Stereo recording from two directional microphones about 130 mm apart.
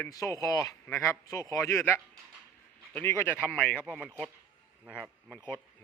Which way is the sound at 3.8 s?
10° right (ahead or behind).